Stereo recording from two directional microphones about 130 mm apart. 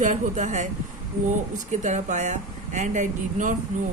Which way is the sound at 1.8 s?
65° right (ahead or behind).